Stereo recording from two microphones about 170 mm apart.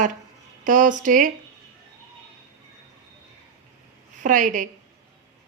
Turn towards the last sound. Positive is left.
turn(degrees=-50)  # may be behind; listen again after turning